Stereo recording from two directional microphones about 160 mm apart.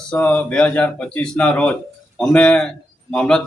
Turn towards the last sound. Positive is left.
turn(degrees=5)  # may be behind; listen again after turning